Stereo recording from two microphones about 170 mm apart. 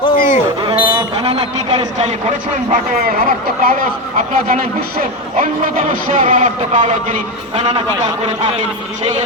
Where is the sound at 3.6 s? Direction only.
55° right (ahead or behind).